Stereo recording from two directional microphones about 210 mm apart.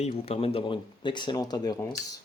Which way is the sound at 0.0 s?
30° left (ahead or behind).